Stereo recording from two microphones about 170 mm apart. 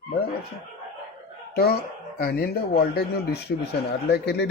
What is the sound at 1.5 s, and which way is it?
Speech, 65° left (ahead or behind).